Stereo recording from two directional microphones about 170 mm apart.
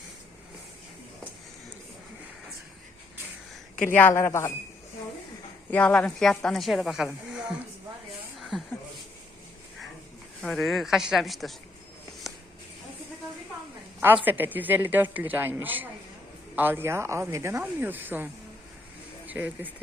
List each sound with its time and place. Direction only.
3.8 s speech: 10° left (ahead or behind)
5.7 s a woman's voice: 10° left (ahead or behind)
8.4 s a sound: centre (ahead or behind)
10.4 s a woman's voice: centre (ahead or behind)
14.3 s speech: 10° right (ahead or behind)
19.3 s speech: 10° right (ahead or behind)